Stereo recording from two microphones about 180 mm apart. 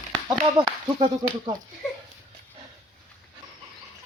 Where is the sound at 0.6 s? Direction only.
25° right (ahead or behind).